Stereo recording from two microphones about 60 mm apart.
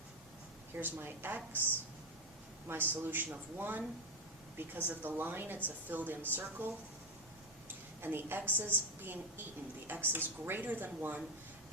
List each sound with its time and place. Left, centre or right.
0.8 s speech: right
2.6 s speech: right
8.0 s speech: right